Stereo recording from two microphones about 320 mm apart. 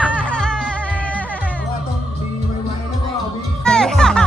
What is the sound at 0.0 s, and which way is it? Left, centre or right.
Music, centre.